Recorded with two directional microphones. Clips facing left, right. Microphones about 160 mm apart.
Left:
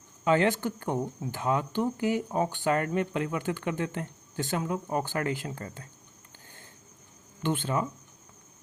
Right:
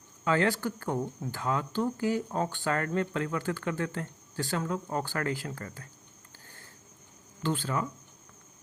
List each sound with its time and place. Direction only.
0.3 s speech: 20° left (ahead or behind)
7.4 s speech: 20° left (ahead or behind)